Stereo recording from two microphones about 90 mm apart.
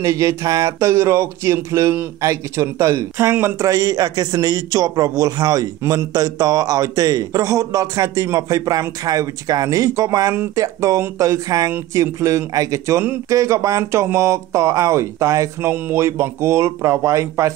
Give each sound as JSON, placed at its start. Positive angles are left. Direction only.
{"t": 0.0, "sound": "speech", "side_deg": -35}